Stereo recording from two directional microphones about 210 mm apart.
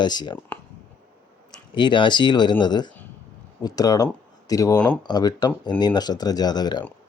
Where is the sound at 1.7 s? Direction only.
20° left (ahead or behind).